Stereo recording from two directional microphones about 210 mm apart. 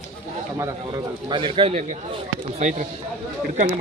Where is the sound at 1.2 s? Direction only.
20° right (ahead or behind).